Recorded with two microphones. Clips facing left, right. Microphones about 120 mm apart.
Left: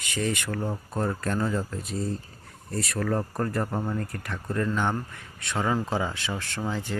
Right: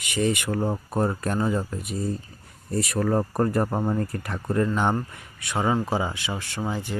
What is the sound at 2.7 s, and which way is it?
Speech, 25° right (ahead or behind).